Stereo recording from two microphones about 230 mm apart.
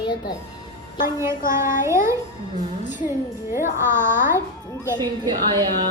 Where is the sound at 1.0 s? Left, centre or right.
Centre.